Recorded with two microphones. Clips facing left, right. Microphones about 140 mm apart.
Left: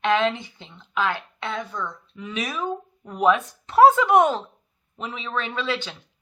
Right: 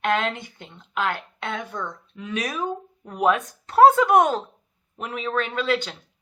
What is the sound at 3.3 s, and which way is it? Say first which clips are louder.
Speech: left 2 dB; 45° right (ahead or behind).